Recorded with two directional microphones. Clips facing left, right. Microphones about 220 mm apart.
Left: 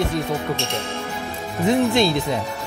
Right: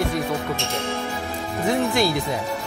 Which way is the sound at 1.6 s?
20° left (ahead or behind).